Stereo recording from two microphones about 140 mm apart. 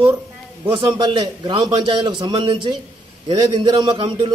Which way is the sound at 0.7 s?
30° right (ahead or behind).